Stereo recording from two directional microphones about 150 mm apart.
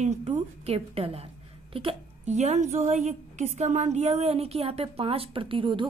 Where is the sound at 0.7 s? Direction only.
40° right (ahead or behind).